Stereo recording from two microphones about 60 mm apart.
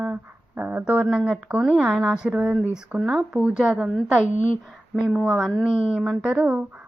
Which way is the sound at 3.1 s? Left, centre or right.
Centre.